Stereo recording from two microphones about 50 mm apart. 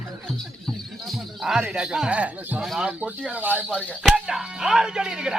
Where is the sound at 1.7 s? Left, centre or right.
Centre.